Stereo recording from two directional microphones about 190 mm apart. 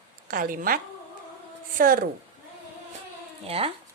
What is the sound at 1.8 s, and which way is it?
Speech, 50° right (ahead or behind).